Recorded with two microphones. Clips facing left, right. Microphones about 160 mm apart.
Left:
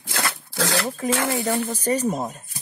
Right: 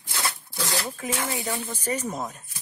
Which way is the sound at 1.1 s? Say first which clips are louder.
Left 6 dB; 75° left (ahead or behind).